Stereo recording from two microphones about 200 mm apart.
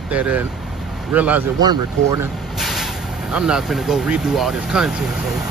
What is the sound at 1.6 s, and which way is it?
Speech, 20° right (ahead or behind).